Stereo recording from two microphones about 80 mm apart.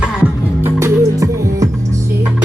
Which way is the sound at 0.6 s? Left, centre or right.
Right.